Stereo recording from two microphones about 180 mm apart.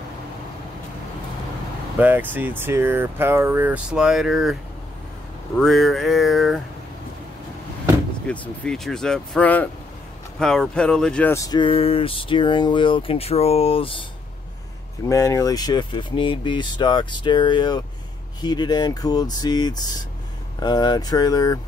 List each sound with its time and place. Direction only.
2.0 s speech: 10° right (ahead or behind)
5.6 s speech: centre (ahead or behind)
8.3 s speech: 5° left (ahead or behind); by 14.0 s 30° left (ahead or behind)
15.0 s speech: 20° left (ahead or behind)